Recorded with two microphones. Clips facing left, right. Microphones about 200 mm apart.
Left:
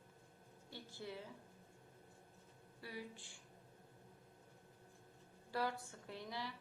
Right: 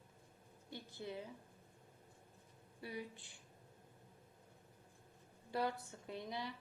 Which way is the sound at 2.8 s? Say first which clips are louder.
Right 3 dB; 20° right (ahead or behind).